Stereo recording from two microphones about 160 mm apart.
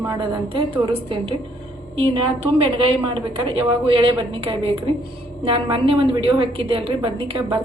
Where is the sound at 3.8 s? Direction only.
35° right (ahead or behind).